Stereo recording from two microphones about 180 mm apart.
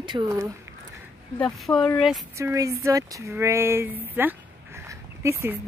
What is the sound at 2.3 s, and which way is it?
Speech, 15° right (ahead or behind).